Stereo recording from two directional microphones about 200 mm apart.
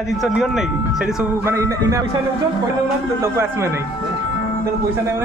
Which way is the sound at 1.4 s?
15° right (ahead or behind).